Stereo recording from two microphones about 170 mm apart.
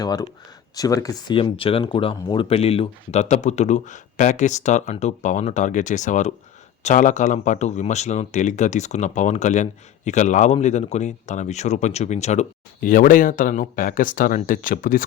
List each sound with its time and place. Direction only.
0.0 s speech: 25° left (ahead or behind); by 15.0 s 55° left (ahead or behind)